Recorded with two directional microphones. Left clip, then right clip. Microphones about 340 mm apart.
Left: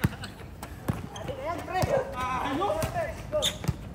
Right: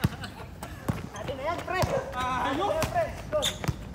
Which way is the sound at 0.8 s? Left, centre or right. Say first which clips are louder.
Right 1 dB; centre.